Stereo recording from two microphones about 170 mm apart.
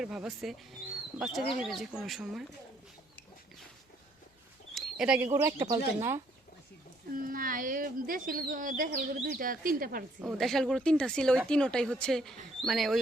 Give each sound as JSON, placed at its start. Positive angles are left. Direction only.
{"t": 0.0, "sound": "speech", "side_deg": -5}
{"t": 4.7, "sound": "speech", "side_deg": -5}
{"t": 7.2, "sound": "speech", "side_deg": -55}
{"t": 10.2, "sound": "speech", "side_deg": 0}